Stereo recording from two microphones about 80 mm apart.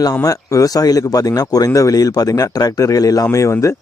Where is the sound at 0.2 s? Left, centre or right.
Left.